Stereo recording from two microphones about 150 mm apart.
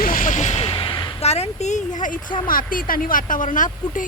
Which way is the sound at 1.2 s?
45° left (ahead or behind).